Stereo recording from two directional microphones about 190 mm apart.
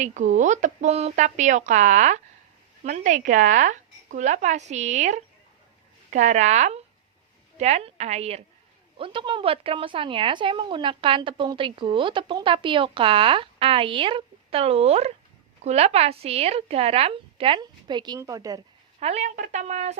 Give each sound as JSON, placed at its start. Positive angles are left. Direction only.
{"t": 0.0, "sound": "a woman's voice", "side_deg": -40}
{"t": 18.9, "sound": "a woman's voice", "side_deg": -35}